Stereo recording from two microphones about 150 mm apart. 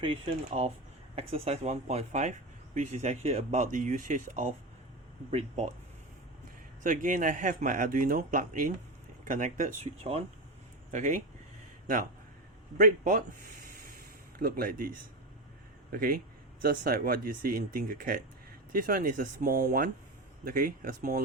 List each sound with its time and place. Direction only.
0.0 s a man's voice: 40° right (ahead or behind); by 4.4 s 60° right (ahead or behind)
6.8 s a man's voice: 60° right (ahead or behind)
10.0 s speech: 40° right (ahead or behind)
10.9 s a man's voice: 60° right (ahead or behind)
12.7 s speech: 65° right (ahead or behind)
14.3 s speech: 80° right